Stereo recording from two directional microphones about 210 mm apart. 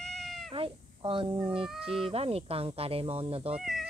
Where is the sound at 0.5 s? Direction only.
25° right (ahead or behind).